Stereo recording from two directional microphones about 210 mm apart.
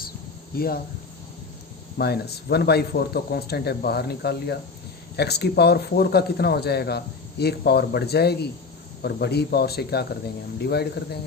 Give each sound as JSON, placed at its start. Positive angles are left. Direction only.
{"t": 0.5, "sound": "speech", "side_deg": 45}
{"t": 2.0, "sound": "speech", "side_deg": 50}